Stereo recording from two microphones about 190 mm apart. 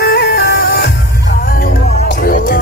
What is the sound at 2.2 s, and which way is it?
Music, 50° left (ahead or behind).